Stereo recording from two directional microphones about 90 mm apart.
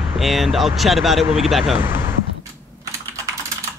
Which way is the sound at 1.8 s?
25° right (ahead or behind).